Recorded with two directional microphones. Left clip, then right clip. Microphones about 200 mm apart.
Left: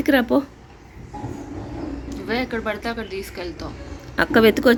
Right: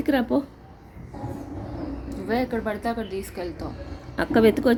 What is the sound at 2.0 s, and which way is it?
A woman's voice, 30° right (ahead or behind).